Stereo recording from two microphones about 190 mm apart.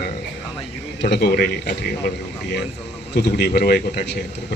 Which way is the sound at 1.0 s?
60° left (ahead or behind).